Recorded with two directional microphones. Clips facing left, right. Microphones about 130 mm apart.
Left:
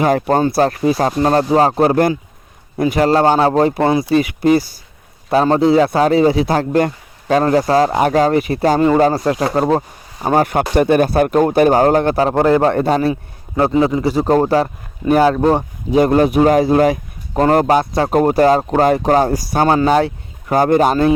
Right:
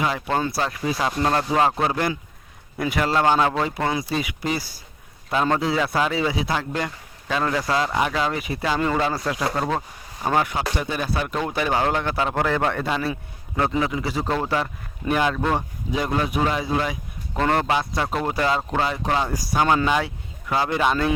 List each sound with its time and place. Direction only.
0.0 s speech: 45° left (ahead or behind)
0.5 s a man's voice: 55° left (ahead or behind); by 4.0 s 30° left (ahead or behind)
4.1 s speech: 55° left (ahead or behind)
5.3 s a man's voice: 35° left (ahead or behind)
8.4 s speech: 60° left (ahead or behind)
8.6 s a man's voice: 40° left (ahead or behind)
10.4 s a man's voice: 55° left (ahead or behind)
13.6 s a man's voice: 30° left (ahead or behind)
16.0 s a man's voice: 50° left (ahead or behind)
20.1 s speech: 50° left (ahead or behind)